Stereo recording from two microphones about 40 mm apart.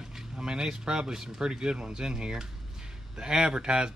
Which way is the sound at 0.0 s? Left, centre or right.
Centre.